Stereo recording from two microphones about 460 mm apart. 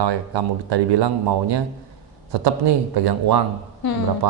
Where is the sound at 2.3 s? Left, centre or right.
Right.